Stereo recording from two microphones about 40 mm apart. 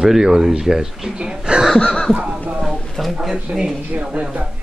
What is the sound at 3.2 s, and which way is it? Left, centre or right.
Speech, centre.